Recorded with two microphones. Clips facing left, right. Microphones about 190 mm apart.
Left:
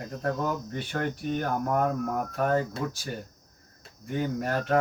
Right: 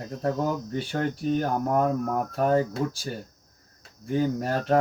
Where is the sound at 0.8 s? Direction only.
30° right (ahead or behind).